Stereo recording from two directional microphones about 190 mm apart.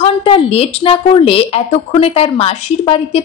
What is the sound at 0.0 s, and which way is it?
A woman's voice, 30° left (ahead or behind).